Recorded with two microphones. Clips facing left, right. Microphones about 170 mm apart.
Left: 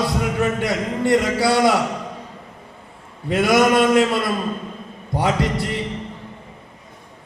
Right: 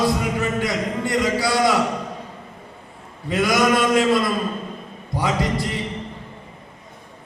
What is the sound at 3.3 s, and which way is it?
Speech, 65° left (ahead or behind).